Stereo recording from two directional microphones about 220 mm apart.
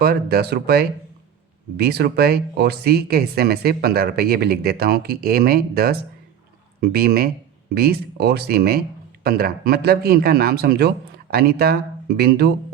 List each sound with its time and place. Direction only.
0.0 s speech: 45° right (ahead or behind)